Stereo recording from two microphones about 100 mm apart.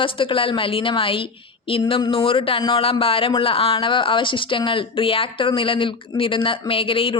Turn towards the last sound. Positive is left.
turn(degrees=65)  # may be behind; listen again after turning